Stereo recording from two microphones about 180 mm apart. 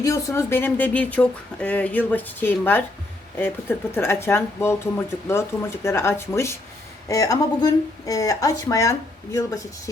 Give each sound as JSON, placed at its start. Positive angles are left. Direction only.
{"t": 0.0, "sound": "speech", "side_deg": 15}